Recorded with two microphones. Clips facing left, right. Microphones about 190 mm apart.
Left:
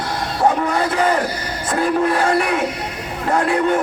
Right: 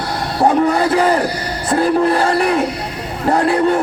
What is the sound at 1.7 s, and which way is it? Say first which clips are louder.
Speech: right 4 dB; 35° right (ahead or behind).